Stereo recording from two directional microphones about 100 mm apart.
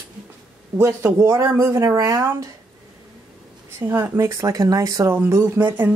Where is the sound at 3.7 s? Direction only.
25° right (ahead or behind).